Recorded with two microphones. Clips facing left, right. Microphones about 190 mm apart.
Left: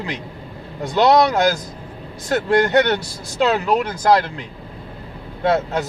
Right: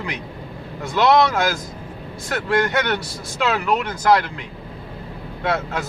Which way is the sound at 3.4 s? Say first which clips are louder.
Left 3 dB; 30° left (ahead or behind).